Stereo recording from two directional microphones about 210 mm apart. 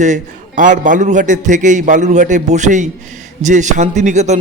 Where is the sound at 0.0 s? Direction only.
35° right (ahead or behind).